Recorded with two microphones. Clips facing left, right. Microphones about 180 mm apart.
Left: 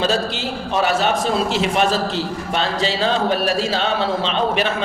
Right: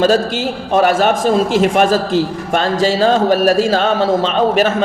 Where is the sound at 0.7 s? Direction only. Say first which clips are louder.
Right 6 dB; 50° right (ahead or behind).